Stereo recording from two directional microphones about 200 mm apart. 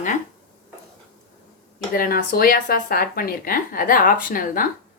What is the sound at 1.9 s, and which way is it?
A woman's voice, 45° left (ahead or behind).